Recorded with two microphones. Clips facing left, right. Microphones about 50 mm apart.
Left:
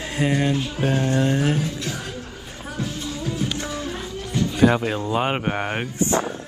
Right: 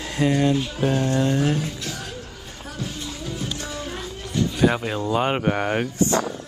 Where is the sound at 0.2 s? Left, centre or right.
Left.